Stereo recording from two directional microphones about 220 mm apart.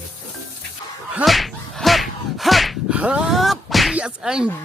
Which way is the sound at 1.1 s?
Centre (ahead or behind).